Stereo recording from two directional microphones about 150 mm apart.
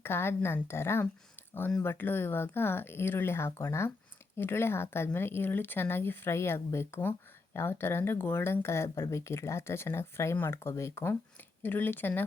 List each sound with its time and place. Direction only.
0.0 s speech: 15° left (ahead or behind)